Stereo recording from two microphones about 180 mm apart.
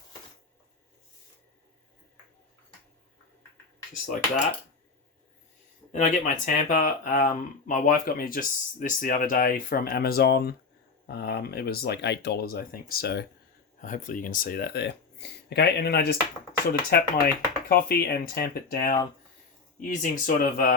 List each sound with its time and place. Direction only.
5.9 s speech: 45° left (ahead or behind); by 13.2 s 60° left (ahead or behind)
13.8 s speech: 45° left (ahead or behind)